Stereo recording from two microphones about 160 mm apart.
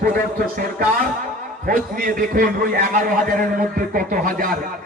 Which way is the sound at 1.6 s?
60° right (ahead or behind).